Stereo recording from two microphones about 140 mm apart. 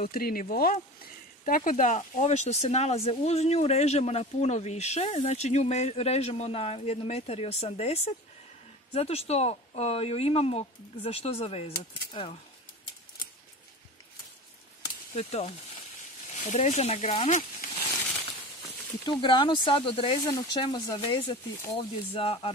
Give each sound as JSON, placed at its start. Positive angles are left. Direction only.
{"t": 0.0, "sound": "speech", "side_deg": 90}
{"t": 15.1, "sound": "speech", "side_deg": 45}
{"t": 19.0, "sound": "speech", "side_deg": 35}
{"t": 22.1, "sound": "speech", "side_deg": 40}